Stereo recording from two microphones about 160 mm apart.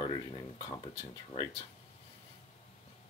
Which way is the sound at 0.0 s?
30° left (ahead or behind).